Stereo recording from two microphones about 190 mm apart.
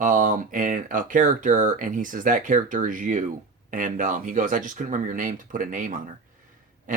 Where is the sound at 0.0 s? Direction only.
45° right (ahead or behind).